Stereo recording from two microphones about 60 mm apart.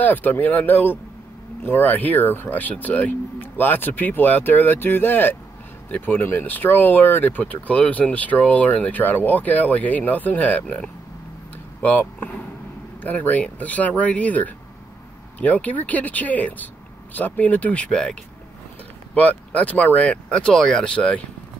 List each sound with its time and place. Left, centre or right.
0.0 s speech: left
11.8 s speech: left
19.1 s speech: left